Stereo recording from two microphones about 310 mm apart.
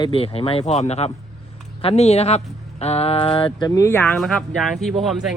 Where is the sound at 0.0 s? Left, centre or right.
Centre.